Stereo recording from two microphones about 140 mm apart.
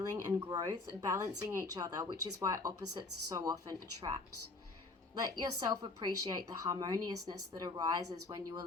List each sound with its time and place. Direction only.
0.1 s speech: 25° right (ahead or behind)
5.2 s speech: 30° right (ahead or behind)